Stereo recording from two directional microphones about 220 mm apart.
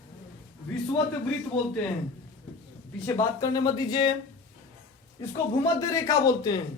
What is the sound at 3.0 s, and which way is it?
Speech, 15° left (ahead or behind).